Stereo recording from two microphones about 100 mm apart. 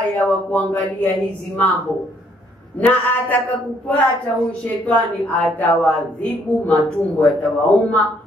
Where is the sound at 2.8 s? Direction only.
15° left (ahead or behind).